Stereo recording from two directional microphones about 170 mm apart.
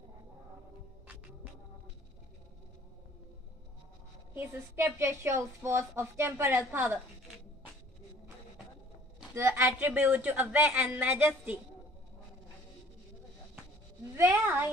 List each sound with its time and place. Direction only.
4.3 s a woman's voice: 15° right (ahead or behind)
9.3 s a woman's voice: 15° right (ahead or behind)
14.1 s a woman's voice: 15° right (ahead or behind)